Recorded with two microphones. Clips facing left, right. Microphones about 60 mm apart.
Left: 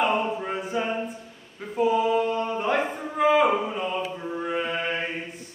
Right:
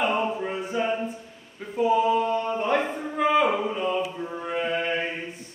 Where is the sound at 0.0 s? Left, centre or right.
Centre.